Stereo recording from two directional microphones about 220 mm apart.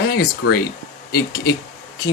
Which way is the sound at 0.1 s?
45° left (ahead or behind).